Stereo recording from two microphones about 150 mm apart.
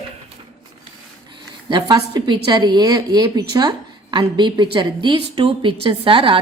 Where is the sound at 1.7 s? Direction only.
30° right (ahead or behind).